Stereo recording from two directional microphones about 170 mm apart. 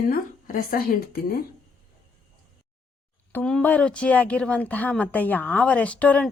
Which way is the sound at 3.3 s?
5° left (ahead or behind).